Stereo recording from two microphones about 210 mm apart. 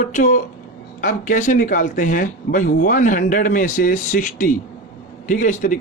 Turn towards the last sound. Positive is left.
turn(degrees=35)  # may be behind; listen again after turning